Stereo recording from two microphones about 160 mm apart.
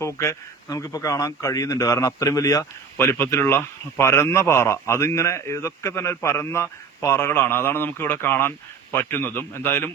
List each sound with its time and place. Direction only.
0.0 s speech: 20° left (ahead or behind)